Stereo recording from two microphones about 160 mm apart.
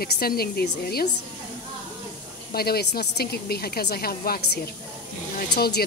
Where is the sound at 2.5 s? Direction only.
75° left (ahead or behind).